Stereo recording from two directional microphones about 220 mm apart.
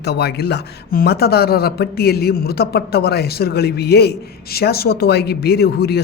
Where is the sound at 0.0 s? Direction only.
45° left (ahead or behind).